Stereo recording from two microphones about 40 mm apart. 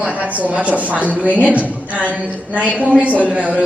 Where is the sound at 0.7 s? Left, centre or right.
Right.